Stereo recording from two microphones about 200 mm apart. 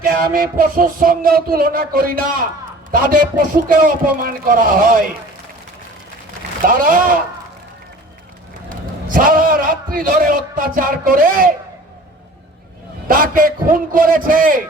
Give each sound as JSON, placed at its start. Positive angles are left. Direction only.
{"t": 0.0, "sound": "a man's voice", "side_deg": -45}
{"t": 6.7, "sound": "a man's voice", "side_deg": -45}
{"t": 9.0, "sound": "a man's voice", "side_deg": -45}
{"t": 13.1, "sound": "a man's voice", "side_deg": -45}